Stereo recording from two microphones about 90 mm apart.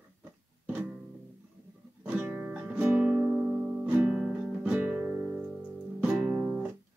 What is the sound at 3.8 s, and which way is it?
Music, 20° right (ahead or behind).